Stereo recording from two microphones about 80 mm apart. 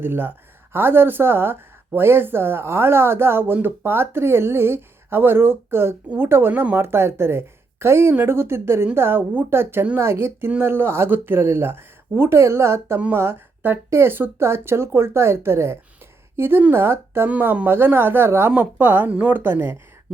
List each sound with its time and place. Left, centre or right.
0.0 s speech: right
17.2 s speech: centre
18.5 s speech: right